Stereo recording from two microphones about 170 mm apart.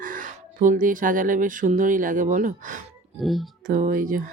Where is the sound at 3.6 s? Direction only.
50° right (ahead or behind).